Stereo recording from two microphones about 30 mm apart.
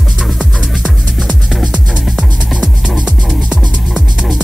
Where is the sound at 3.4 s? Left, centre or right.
Right.